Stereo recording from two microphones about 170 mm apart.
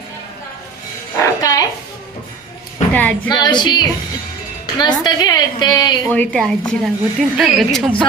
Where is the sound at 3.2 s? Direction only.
25° left (ahead or behind).